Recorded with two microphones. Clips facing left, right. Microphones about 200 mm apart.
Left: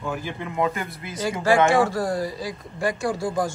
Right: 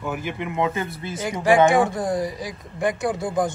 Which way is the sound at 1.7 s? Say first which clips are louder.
Right 1 dB; 20° right (ahead or behind).